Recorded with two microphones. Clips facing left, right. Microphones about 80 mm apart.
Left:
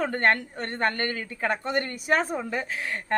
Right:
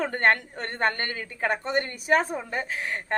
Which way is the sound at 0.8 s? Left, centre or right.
Right.